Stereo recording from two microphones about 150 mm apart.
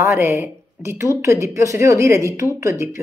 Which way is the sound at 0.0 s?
15° right (ahead or behind).